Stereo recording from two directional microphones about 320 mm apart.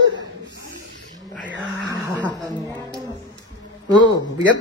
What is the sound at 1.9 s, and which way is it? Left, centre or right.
Dog, centre.